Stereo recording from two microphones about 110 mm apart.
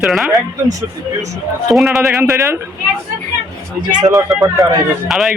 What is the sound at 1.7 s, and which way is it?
Speech, centre (ahead or behind).